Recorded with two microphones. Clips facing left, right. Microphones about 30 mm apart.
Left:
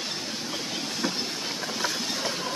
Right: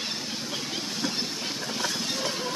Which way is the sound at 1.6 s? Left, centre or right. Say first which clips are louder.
Left 1 dB; centre.